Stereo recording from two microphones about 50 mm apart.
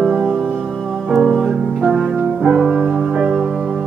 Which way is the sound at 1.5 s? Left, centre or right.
Centre.